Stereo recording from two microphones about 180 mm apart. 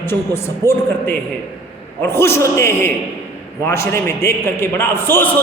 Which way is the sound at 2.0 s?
15° left (ahead or behind).